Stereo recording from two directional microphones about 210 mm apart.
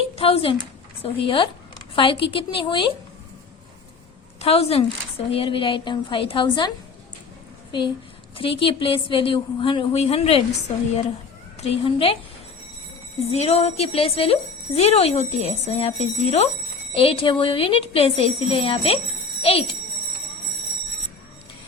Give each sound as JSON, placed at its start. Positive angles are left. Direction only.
{"t": 0.2, "sound": "a woman's voice", "side_deg": 25}
{"t": 4.4, "sound": "a woman's voice", "side_deg": 30}
{"t": 8.4, "sound": "a woman's voice", "side_deg": 25}
{"t": 11.6, "sound": "a woman's voice", "side_deg": 25}
{"t": 13.3, "sound": "a woman's voice", "side_deg": 30}